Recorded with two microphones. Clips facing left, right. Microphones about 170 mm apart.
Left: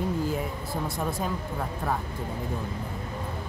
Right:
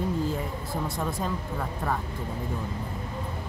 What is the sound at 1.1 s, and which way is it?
Speech, 5° left (ahead or behind).